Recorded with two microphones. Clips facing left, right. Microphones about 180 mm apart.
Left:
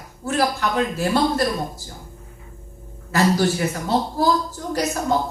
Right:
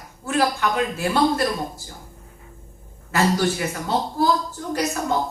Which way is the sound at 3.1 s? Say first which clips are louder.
Left 2 dB; 40° left (ahead or behind).